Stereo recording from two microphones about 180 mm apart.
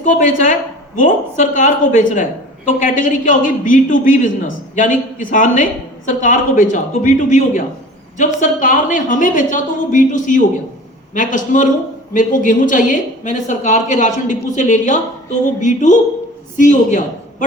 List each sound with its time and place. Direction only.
0.0 s a man's voice: 45° left (ahead or behind)